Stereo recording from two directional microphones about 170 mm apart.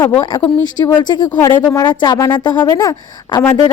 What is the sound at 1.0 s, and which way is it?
Speech, 25° left (ahead or behind).